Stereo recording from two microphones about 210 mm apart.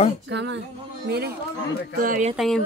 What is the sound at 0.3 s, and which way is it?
Female singing, 55° right (ahead or behind).